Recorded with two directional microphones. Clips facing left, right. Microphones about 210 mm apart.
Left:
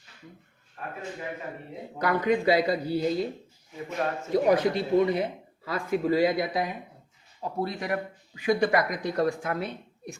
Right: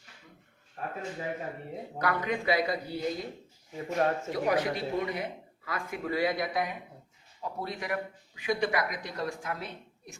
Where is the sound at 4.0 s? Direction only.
40° right (ahead or behind).